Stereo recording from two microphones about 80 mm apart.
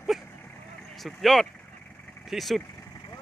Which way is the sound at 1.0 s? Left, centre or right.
Centre.